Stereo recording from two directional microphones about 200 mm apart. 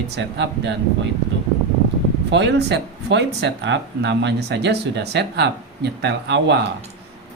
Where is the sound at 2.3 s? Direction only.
60° right (ahead or behind).